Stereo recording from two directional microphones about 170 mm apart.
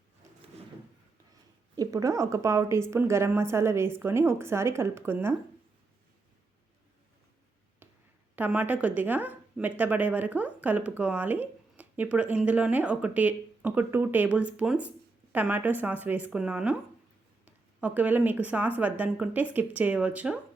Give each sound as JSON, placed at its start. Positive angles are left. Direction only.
{"t": 1.7, "sound": "speech", "side_deg": -20}
{"t": 8.4, "sound": "speech", "side_deg": -10}